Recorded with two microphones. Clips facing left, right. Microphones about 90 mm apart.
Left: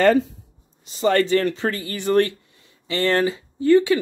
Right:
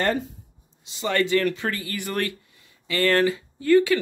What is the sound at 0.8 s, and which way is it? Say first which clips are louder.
Speech: left 5 dB; 40° left (ahead or behind).